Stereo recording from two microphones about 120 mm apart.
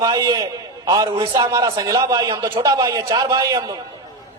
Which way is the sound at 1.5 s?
30° right (ahead or behind).